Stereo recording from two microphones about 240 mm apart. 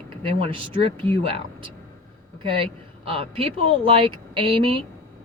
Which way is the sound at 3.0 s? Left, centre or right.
Right.